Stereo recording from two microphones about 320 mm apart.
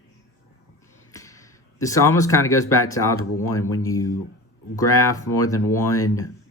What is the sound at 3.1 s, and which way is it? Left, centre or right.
Speech, left.